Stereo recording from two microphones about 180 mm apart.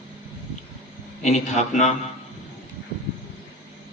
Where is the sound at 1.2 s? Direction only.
40° left (ahead or behind).